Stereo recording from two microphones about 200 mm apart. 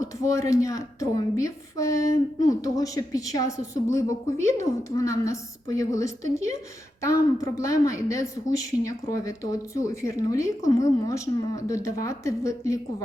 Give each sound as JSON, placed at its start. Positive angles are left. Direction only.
{"t": 0.0, "sound": "a woman's voice", "side_deg": 15}